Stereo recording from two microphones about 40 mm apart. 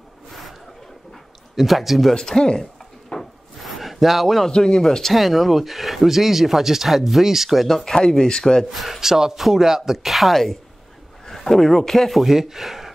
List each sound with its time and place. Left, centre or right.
0.3 s a sound: centre
1.5 s speech: centre
2.1 s speech: centre
3.2 s a sound: centre
4.5 s speech: centre
5.1 s speech: centre
7.8 s speech: centre
8.7 s speech: centre
12.2 s speech: centre